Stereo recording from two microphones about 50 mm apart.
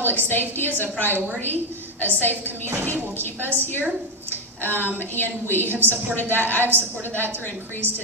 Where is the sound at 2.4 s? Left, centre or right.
Right.